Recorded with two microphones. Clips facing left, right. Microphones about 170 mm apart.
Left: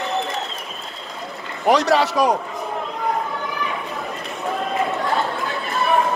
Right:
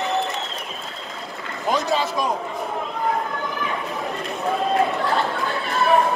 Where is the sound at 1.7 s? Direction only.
75° left (ahead or behind).